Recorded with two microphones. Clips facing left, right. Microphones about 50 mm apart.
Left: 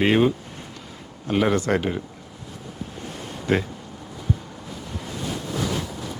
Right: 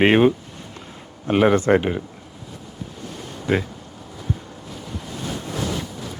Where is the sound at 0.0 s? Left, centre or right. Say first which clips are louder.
Right 4 dB; right; by 2.0 s centre.